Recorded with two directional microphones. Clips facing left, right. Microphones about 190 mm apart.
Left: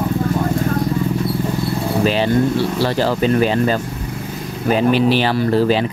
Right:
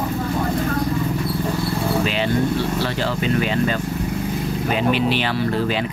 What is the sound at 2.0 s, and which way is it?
Speech, 35° left (ahead or behind).